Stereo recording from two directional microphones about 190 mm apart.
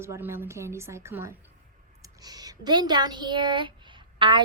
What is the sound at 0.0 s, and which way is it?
Speech, 15° right (ahead or behind).